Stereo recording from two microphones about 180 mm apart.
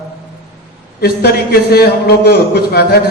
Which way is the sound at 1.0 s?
65° left (ahead or behind).